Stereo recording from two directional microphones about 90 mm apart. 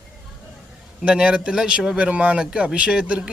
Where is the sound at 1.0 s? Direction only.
10° right (ahead or behind).